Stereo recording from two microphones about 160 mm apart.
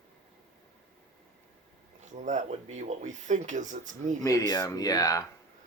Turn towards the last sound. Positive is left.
turn(degrees=20)  # may be behind; listen again after turning